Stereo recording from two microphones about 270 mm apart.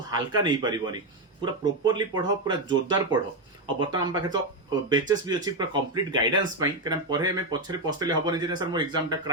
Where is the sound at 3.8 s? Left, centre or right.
Centre.